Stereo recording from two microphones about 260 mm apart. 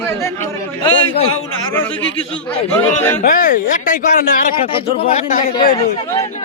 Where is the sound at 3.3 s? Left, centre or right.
Left.